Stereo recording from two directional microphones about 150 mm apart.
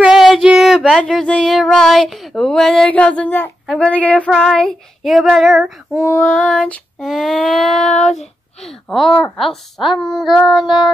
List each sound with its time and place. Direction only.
0.0 s female singing: centre (ahead or behind)
3.6 s a woman's voice: 5° left (ahead or behind)